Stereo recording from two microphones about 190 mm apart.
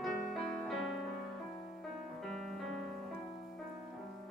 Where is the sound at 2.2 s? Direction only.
Centre (ahead or behind).